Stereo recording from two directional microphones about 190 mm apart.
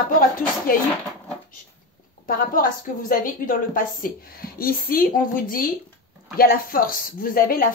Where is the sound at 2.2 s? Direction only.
50° left (ahead or behind).